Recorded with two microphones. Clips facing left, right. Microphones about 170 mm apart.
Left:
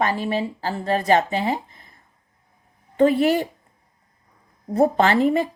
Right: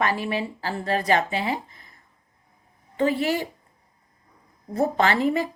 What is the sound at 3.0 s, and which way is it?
Speech, 55° left (ahead or behind).